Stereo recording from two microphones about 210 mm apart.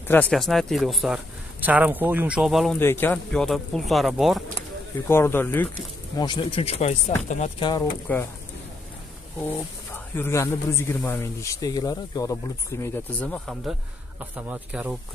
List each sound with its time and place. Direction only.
0.1 s speech: 5° left (ahead or behind)
2.8 s speech: 10° left (ahead or behind)
5.0 s a man's voice: 10° left (ahead or behind)
6.1 s speech: 20° left (ahead or behind)
7.6 s a man's voice: 15° left (ahead or behind)
9.4 s a man's voice: 10° left (ahead or behind); by 15.0 s 5° right (ahead or behind)